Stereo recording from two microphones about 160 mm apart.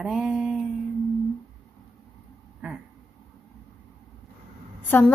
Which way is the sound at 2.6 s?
5° right (ahead or behind).